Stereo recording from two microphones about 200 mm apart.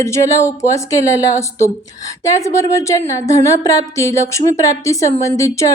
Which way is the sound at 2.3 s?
15° left (ahead or behind).